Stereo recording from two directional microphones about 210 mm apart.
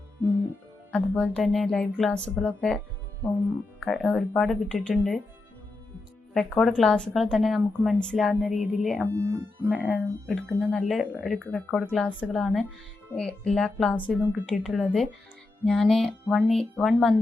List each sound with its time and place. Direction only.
0.9 s a woman's voice: 5° left (ahead or behind)
6.3 s a woman's voice: centre (ahead or behind)
9.1 s speech: 20° right (ahead or behind)
9.6 s a woman's voice: 5° right (ahead or behind)
11.3 s a woman's voice: 5° left (ahead or behind)